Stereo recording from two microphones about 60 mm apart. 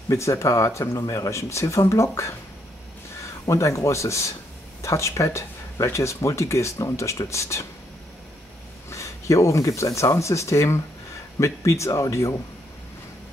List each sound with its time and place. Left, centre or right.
0.1 s a man's voice: left
8.9 s speech: left